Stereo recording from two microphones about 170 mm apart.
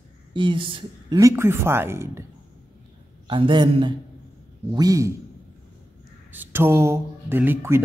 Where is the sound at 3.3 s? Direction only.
30° right (ahead or behind).